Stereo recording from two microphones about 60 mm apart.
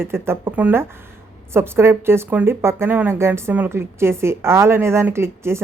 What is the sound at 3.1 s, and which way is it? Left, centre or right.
A woman's voice, right.